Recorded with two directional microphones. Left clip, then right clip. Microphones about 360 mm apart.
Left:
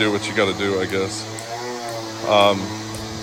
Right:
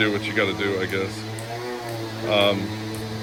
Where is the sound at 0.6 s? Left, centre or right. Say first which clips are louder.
Left 3 dB; left.